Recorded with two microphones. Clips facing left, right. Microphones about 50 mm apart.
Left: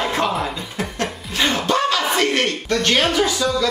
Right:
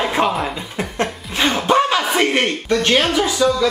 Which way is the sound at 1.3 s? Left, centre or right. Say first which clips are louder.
Right 3 dB; centre.